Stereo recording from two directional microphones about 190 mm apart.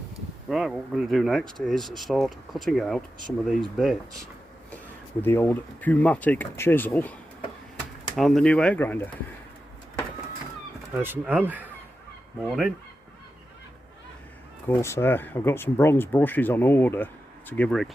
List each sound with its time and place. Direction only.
0.5 s speech: centre (ahead or behind)
5.2 s speech: 10° left (ahead or behind)
11.0 s speech: 10° right (ahead or behind)
14.7 s speech: 15° left (ahead or behind)